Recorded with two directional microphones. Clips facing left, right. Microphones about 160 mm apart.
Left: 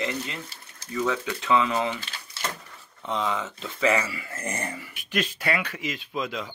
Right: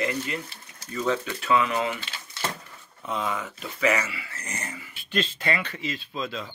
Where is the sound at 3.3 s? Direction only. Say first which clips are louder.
Left 2 dB; 20° left (ahead or behind).